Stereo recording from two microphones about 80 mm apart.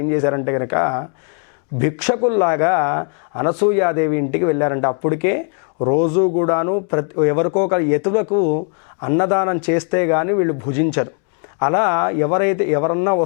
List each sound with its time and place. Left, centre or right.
0.0 s speech: centre